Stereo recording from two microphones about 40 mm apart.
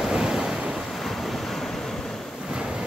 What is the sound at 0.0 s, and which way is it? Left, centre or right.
Waves, centre.